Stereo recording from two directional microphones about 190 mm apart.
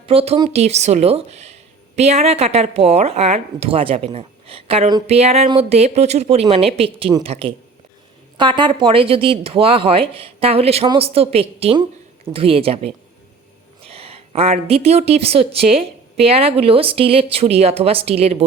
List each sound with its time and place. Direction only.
0.0 s a woman's voice: 30° right (ahead or behind)